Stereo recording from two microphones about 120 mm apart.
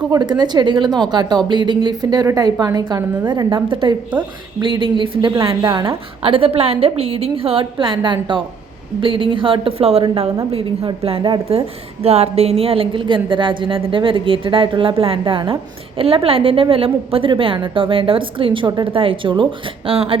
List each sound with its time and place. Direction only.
0.1 s a woman's voice: 35° right (ahead or behind); by 20.1 s 50° right (ahead or behind)